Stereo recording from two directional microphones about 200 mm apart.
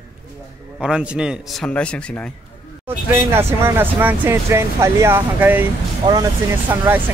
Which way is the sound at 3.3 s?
10° right (ahead or behind).